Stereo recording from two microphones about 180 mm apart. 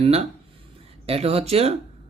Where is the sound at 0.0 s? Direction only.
35° right (ahead or behind).